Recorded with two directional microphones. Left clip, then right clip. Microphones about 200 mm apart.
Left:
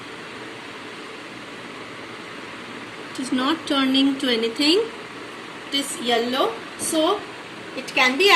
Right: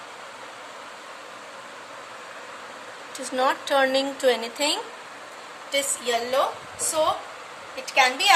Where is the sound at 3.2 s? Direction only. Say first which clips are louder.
Even; 55° right (ahead or behind).